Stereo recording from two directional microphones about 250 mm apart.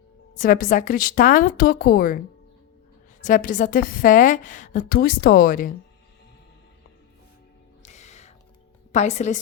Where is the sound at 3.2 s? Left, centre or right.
Left.